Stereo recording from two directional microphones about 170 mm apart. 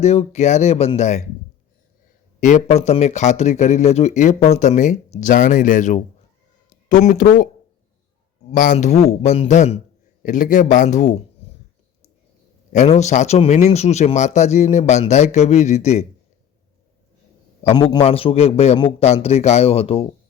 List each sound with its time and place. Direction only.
0.0 s a man's voice: 40° left (ahead or behind)
2.4 s speech: 45° left (ahead or behind)
8.4 s a man's voice: 50° left (ahead or behind)
12.7 s a man's voice: 45° left (ahead or behind)
17.7 s a man's voice: 25° left (ahead or behind)